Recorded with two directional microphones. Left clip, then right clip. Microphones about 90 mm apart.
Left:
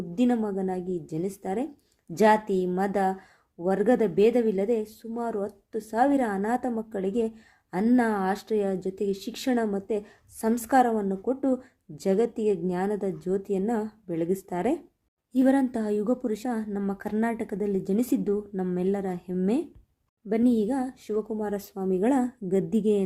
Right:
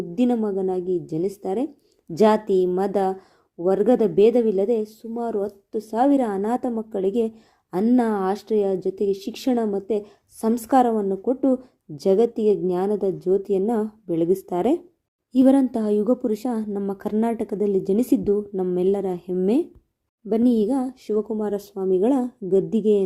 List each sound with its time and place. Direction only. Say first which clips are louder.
0.2 s a woman's voice: right 4 dB; 20° right (ahead or behind)
21.7 s a woman's voice: right 5 dB; 5° right (ahead or behind)